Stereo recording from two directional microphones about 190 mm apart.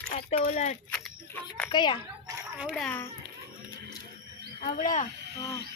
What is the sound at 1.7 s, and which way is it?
Speech, 25° left (ahead or behind).